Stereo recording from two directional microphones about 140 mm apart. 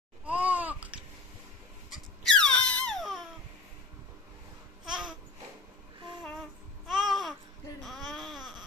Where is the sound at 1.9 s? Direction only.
5° left (ahead or behind).